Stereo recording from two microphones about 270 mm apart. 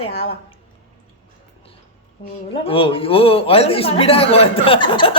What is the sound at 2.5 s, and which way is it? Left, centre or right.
A man's voice, left.